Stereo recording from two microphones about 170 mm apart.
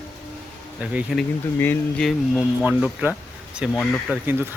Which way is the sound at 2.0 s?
5° right (ahead or behind).